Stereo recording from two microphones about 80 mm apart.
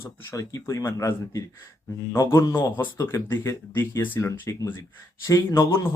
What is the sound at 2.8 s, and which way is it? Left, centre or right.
Speech, left.